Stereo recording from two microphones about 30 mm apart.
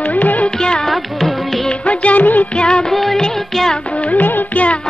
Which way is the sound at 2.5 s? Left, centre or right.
Left.